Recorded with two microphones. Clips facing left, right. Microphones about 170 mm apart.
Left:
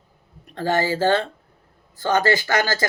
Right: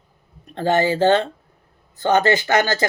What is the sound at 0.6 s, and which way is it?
Speech, 20° right (ahead or behind).